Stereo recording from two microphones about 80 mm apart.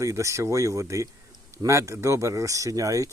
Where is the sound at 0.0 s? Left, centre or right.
Right.